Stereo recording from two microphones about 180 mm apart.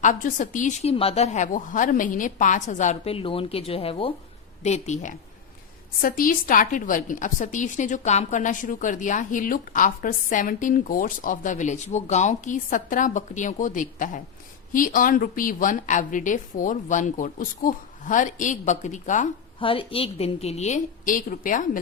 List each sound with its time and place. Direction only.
0.0 s a woman's voice: 45° left (ahead or behind)
6.0 s a woman's voice: 50° left (ahead or behind)
19.5 s a woman's voice: 30° left (ahead or behind); by 21.8 s 50° left (ahead or behind)